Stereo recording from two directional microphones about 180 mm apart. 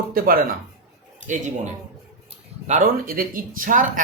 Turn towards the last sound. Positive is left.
turn(degrees=-50)  # may be behind; listen again after turning